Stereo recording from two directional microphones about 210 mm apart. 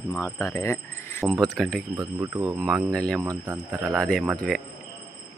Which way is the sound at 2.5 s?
Centre (ahead or behind).